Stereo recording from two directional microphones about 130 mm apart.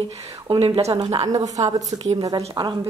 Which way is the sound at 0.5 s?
50° right (ahead or behind).